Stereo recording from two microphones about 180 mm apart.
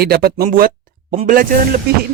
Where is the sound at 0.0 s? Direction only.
55° right (ahead or behind).